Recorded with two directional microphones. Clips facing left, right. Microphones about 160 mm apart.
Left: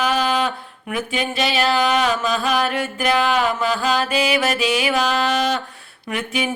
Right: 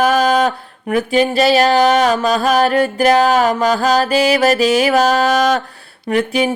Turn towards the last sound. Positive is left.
turn(degrees=-35)  # may be behind; listen again after turning